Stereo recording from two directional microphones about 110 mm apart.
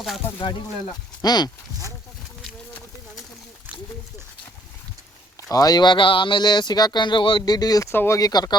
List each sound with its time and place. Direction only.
1.2 s speech: 40° left (ahead or behind)
5.5 s speech: 35° left (ahead or behind)
8.2 s speech: 40° left (ahead or behind)